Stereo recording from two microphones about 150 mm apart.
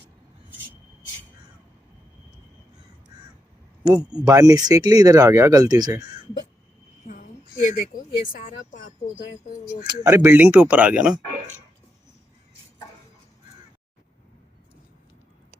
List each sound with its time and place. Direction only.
3.8 s speech: 30° right (ahead or behind)
7.8 s speech: 70° left (ahead or behind)
9.8 s speech: 25° right (ahead or behind); by 11.2 s 5° right (ahead or behind)